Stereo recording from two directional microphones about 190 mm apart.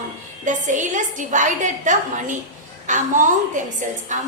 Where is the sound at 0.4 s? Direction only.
40° right (ahead or behind).